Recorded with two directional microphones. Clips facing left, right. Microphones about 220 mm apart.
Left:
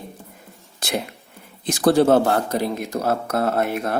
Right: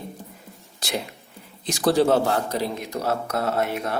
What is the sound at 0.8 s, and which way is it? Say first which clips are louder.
A man's voice: left 3 dB; 55° left (ahead or behind).